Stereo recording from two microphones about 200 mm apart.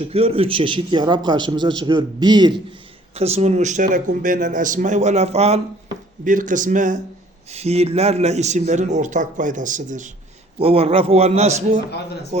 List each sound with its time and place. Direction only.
0.1 s a man's voice: 30° right (ahead or behind)
3.2 s speech: 30° right (ahead or behind)
10.6 s speech: 30° right (ahead or behind)